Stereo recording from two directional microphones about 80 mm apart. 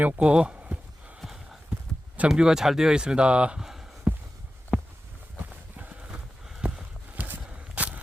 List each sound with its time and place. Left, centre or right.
0.0 s speech: centre
2.1 s speech: centre
4.1 s heart sounds: centre
5.7 s horse: centre
7.3 s a sound: right